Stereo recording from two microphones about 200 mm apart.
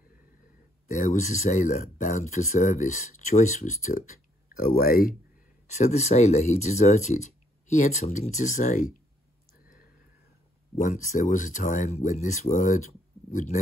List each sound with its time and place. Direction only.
0.8 s speech: 40° left (ahead or behind)
5.7 s speech: 35° left (ahead or behind)
10.8 s speech: 40° left (ahead or behind)